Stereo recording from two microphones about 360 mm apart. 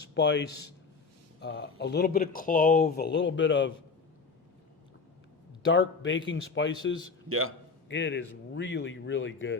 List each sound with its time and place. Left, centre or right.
0.1 s a man's voice: left
5.7 s speech: left
7.3 s a man's voice: right
7.9 s speech: left